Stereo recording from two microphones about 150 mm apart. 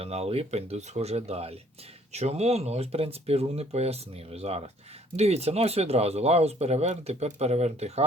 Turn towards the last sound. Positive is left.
turn(degrees=-45)  # may be behind; listen again after turning